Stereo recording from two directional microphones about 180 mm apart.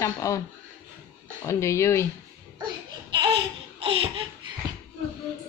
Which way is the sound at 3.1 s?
25° right (ahead or behind).